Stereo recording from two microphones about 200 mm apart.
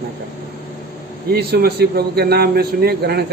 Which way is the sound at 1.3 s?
50° right (ahead or behind).